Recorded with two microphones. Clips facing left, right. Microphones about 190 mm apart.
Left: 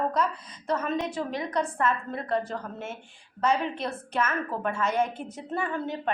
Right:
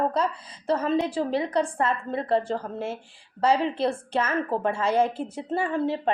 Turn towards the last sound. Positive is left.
turn(degrees=-30)  # may be behind; listen again after turning